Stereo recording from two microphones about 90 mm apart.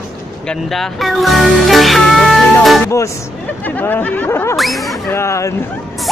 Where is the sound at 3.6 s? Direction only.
20° left (ahead or behind).